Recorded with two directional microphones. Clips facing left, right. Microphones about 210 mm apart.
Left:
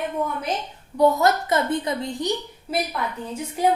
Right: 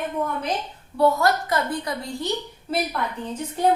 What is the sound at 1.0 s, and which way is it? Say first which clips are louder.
A woman's voice: left 1 dB; 20° left (ahead or behind).